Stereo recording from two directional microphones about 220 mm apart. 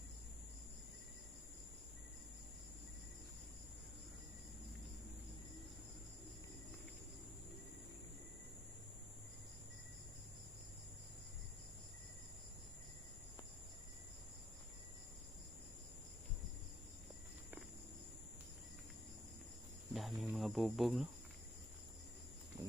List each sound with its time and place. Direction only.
19.9 s cricket: centre (ahead or behind)